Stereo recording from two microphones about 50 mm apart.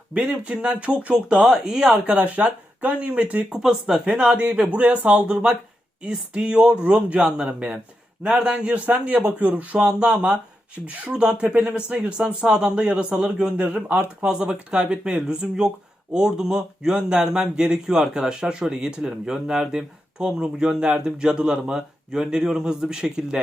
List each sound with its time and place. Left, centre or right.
0.1 s speech: right
2.1 s speech: right
3.5 s speech: centre
4.0 s speech: right
7.2 s speech: centre
7.4 s speech: right
8.2 s speech: right
14.3 s speech: centre